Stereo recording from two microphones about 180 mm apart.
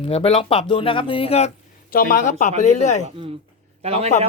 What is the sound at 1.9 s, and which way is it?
Speech, 50° left (ahead or behind).